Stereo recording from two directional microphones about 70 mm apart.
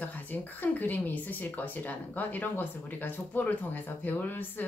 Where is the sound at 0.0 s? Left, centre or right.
Left.